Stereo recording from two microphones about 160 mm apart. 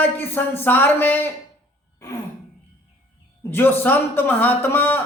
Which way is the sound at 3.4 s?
15° left (ahead or behind).